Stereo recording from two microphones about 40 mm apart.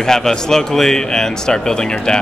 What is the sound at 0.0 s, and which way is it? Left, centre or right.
A man's voice, centre.